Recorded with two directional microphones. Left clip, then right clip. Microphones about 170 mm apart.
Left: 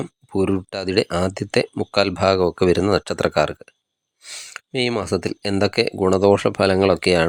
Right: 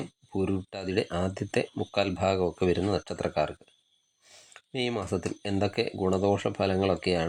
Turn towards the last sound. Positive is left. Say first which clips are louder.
# left 10 dB
turn(degrees=35)  # may be behind; listen again after turning